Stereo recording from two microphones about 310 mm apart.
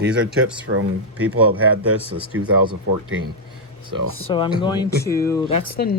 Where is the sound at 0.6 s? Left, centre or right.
Right.